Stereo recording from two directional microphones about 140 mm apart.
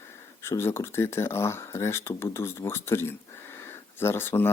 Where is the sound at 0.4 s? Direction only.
20° left (ahead or behind).